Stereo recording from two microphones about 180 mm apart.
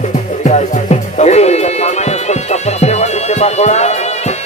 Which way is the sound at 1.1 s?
40° left (ahead or behind).